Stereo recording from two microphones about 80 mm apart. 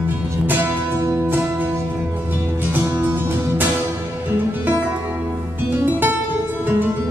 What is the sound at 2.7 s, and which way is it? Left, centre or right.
Music, right.